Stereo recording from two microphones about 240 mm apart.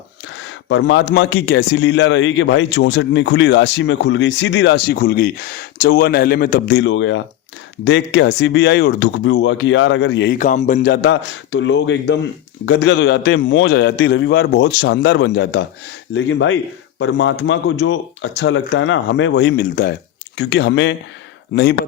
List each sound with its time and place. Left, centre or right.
0.7 s a man's voice: left